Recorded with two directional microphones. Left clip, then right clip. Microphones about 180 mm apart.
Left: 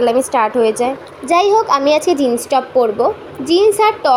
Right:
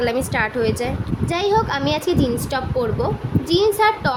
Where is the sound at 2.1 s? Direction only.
15° left (ahead or behind).